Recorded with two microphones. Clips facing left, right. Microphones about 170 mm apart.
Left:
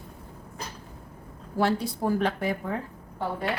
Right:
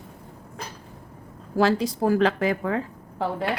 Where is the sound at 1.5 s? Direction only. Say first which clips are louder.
Right 4 dB; 90° right.